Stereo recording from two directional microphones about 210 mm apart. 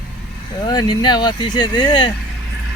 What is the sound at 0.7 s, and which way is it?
Speech, 20° left (ahead or behind).